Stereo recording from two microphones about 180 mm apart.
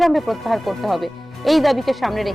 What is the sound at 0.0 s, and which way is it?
Speech, centre (ahead or behind).